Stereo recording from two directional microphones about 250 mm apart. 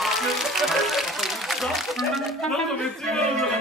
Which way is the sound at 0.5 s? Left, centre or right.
Centre.